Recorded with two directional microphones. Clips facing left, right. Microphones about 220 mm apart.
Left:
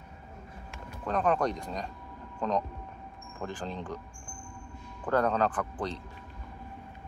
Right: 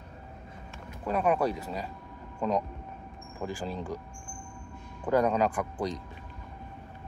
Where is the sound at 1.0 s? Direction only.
10° right (ahead or behind).